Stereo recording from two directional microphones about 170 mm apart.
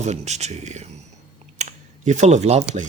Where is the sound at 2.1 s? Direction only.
45° right (ahead or behind).